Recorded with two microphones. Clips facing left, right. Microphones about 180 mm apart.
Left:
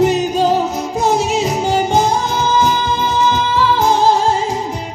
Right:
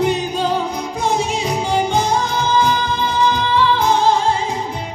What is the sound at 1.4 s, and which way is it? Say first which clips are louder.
Music: left 3 dB; 40° left (ahead or behind).